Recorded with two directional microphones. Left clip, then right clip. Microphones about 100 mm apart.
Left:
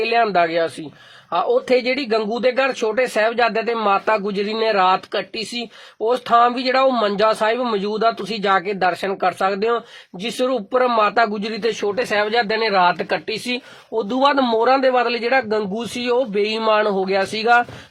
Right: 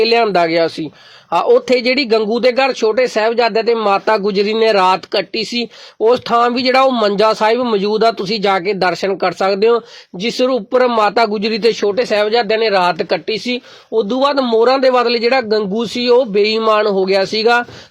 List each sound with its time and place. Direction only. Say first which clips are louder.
0.0 s speech: right 5 dB; 45° right (ahead or behind)
11.7 s speech: right 6 dB; 35° right (ahead or behind)
16.6 s speech: right 4 dB; 35° right (ahead or behind)